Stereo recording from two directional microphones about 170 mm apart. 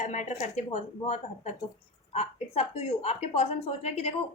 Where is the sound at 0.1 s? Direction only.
45° left (ahead or behind).